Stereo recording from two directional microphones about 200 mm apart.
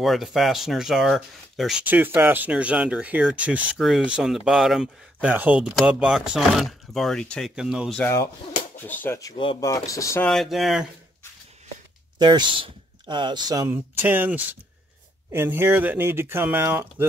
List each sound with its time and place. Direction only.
0.0 s speech: centre (ahead or behind)
8.0 s speech: 15° left (ahead or behind)
10.3 s speech: centre (ahead or behind)
12.2 s speech: 20° right (ahead or behind)